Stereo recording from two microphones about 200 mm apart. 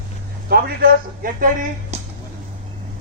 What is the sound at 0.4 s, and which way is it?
Speech, 50° right (ahead or behind).